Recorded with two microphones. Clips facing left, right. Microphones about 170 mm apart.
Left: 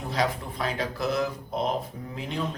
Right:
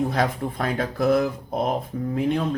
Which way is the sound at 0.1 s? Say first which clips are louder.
Right 4 dB; 50° right (ahead or behind).